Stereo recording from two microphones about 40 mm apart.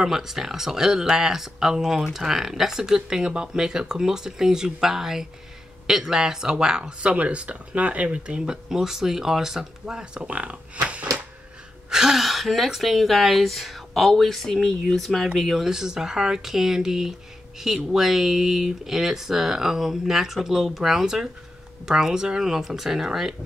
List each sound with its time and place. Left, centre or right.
0.0 s speech: centre
7.0 s speech: right
8.4 s speech: centre; by 11.1 s right
11.9 s speech: centre
15.6 s speech: centre